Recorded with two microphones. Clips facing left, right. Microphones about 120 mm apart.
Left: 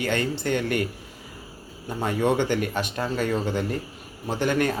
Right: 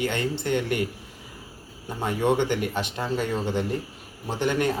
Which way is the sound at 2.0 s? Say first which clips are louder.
Even; 15° right (ahead or behind).